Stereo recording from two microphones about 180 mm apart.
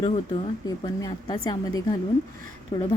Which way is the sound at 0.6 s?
20° left (ahead or behind).